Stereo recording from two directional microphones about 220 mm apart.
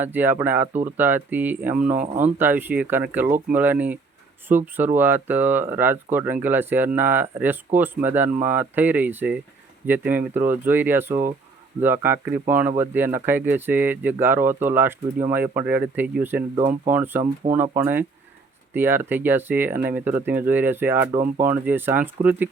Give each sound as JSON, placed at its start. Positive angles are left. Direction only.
{"t": 0.0, "sound": "speech", "side_deg": -10}
{"t": 16.6, "sound": "speech", "side_deg": -35}
{"t": 16.9, "sound": "speech", "side_deg": -10}